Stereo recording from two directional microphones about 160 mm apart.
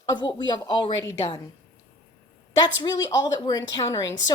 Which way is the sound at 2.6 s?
25° left (ahead or behind).